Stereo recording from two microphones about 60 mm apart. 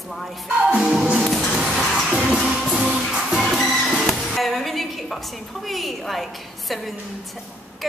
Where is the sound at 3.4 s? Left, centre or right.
Centre.